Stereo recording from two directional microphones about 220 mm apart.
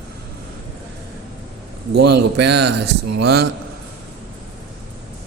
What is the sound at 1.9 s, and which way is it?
Speech, 50° right (ahead or behind).